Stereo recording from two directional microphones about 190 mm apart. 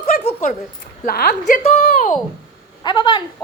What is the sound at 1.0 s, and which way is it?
Speech, 55° left (ahead or behind).